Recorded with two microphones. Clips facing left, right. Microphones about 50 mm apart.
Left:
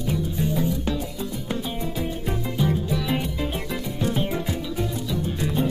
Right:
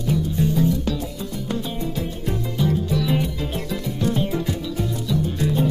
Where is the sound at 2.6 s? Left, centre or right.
Centre.